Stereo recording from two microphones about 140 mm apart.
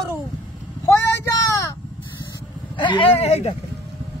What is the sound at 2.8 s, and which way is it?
Speech, 40° left (ahead or behind).